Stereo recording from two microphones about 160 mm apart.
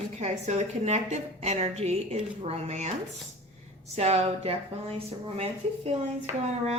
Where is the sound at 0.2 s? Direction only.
45° right (ahead or behind).